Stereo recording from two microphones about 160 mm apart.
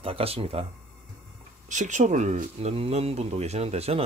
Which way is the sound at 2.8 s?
40° right (ahead or behind).